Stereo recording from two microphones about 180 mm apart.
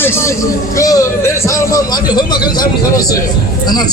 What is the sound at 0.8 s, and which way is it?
A man's voice, 20° left (ahead or behind).